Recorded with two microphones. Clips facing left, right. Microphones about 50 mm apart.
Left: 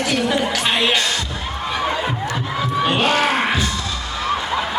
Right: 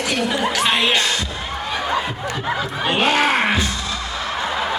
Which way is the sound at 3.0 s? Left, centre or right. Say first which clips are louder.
Right 3 dB; right.